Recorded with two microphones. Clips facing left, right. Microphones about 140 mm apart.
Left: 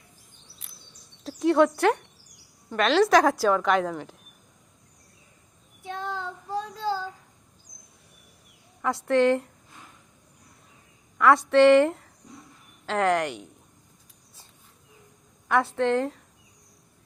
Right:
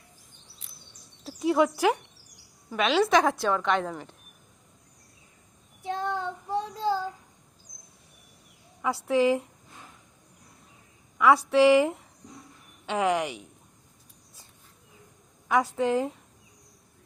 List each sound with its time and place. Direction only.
0.6 s a sound: 60° left (ahead or behind)
1.2 s a woman's voice: 5° right (ahead or behind)
5.8 s child singing: 25° right (ahead or behind)
8.8 s a woman's voice: 5° right (ahead or behind)
11.2 s a woman's voice: 5° right (ahead or behind)
15.4 s a woman's voice: 5° right (ahead or behind)